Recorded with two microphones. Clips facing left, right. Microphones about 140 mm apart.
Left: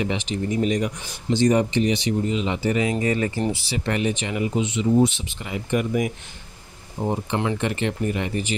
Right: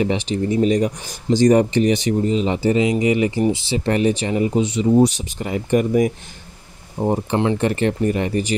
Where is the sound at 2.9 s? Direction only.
15° right (ahead or behind).